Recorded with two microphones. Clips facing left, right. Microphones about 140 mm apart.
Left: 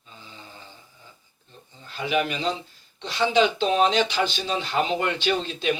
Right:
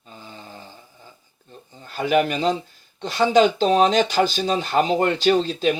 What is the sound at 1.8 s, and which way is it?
A man's voice, 45° right (ahead or behind).